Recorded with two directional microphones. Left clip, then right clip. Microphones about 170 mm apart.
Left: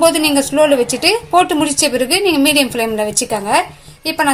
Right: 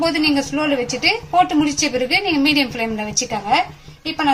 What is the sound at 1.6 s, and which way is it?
A woman's voice, 55° left (ahead or behind).